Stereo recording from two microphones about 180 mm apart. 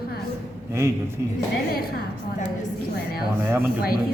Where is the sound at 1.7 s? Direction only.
55° left (ahead or behind).